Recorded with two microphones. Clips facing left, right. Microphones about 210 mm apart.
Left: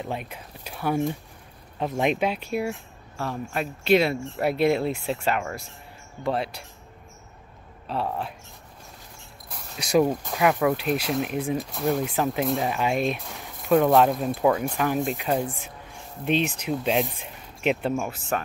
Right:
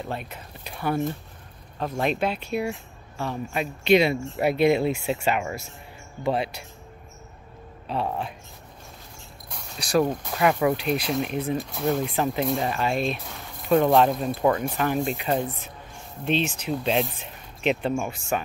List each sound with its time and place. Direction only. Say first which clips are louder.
0.0 s speech: left 1 dB; 10° left (ahead or behind)
7.8 s speech: right 1 dB; centre (ahead or behind)
9.8 s speech: left 2 dB; 20° left (ahead or behind)
10.2 s speech: even; centre (ahead or behind)
13.3 s speech: even; centre (ahead or behind)
16.6 s speech: even; 5° left (ahead or behind)